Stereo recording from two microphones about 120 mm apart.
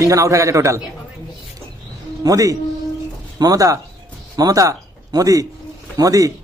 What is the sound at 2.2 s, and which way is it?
A man's voice, 30° right (ahead or behind).